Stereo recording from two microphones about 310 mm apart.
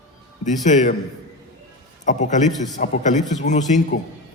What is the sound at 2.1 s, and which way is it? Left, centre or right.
A man's voice, left.